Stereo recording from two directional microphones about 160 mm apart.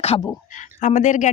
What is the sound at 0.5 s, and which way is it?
Speech, 55° left (ahead or behind).